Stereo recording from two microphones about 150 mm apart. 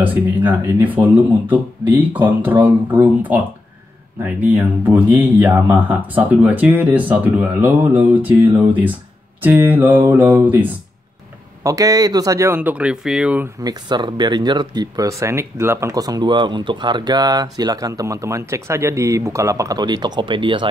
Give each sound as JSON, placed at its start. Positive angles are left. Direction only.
{"t": 0.0, "sound": "speech", "side_deg": -10}
{"t": 4.5, "sound": "speech", "side_deg": -10}
{"t": 11.6, "sound": "speech", "side_deg": -25}
{"t": 13.6, "sound": "speech", "side_deg": -25}